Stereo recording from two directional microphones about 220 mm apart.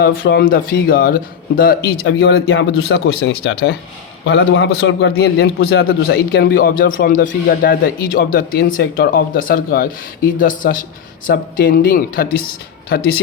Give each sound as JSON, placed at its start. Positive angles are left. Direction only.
{"t": 0.0, "sound": "a man's voice", "side_deg": 45}